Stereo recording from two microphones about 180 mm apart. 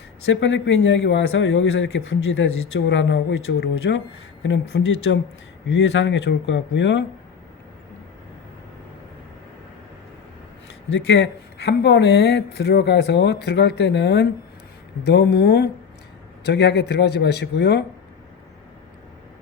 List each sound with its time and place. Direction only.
0.3 s speech: 90° left
2.4 s speech: 80° left
11.1 s speech: 70° left (ahead or behind)